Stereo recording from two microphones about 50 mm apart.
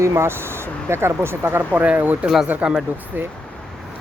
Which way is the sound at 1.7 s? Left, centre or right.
Right.